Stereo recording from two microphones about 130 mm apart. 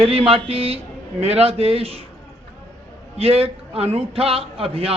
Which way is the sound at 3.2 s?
50° right (ahead or behind).